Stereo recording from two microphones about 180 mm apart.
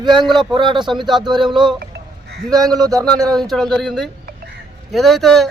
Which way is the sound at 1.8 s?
65° right (ahead or behind).